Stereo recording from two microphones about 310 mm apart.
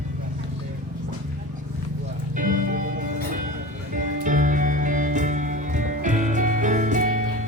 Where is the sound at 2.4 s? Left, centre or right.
Right.